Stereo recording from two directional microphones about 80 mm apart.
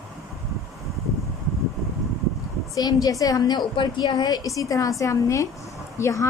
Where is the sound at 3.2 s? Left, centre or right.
Left.